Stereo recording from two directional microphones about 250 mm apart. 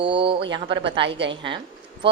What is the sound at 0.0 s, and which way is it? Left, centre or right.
A woman's voice, centre.